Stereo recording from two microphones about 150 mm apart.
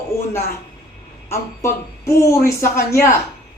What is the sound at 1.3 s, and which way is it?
Speech, 20° left (ahead or behind).